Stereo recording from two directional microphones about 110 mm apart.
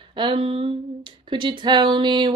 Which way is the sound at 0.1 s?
55° right (ahead or behind).